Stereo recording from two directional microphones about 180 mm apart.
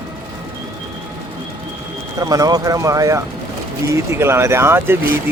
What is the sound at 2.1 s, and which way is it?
Speech, 20° right (ahead or behind).